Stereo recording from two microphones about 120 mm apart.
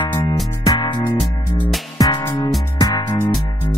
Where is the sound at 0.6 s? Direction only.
35° left (ahead or behind).